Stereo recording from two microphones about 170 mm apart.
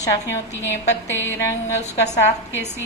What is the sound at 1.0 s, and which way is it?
Music, 15° left (ahead or behind).